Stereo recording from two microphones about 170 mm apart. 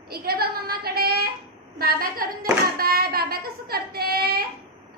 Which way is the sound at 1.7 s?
60° right (ahead or behind).